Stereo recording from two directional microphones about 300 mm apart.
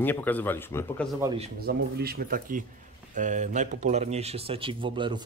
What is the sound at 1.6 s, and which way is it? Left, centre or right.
Speech, right.